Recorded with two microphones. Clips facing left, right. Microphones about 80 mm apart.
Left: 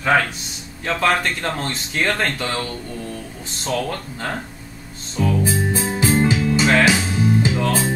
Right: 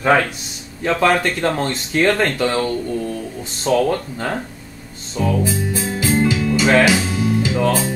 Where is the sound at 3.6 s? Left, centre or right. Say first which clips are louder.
Right 7 dB; centre.